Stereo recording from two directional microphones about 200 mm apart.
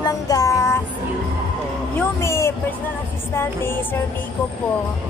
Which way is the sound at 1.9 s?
15° left (ahead or behind).